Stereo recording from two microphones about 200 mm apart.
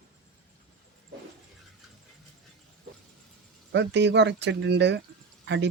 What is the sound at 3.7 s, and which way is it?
Speech, 60° right (ahead or behind).